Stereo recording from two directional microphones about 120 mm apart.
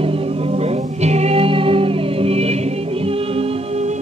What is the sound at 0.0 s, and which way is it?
Music, 55° right (ahead or behind).